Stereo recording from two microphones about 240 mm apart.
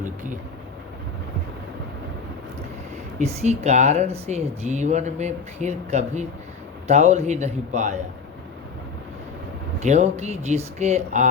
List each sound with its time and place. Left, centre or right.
3.2 s speech: right
9.8 s speech: right